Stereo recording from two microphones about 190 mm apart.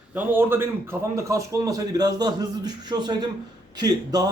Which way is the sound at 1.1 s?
15° right (ahead or behind).